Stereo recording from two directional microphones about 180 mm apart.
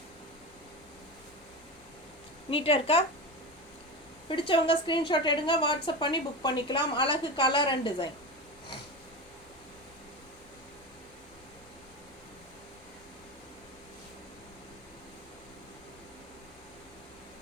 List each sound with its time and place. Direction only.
2.5 s a woman's voice: 30° left (ahead or behind)
4.3 s a woman's voice: 30° left (ahead or behind)